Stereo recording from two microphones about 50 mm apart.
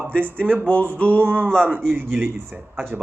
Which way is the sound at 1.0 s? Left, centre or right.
Right.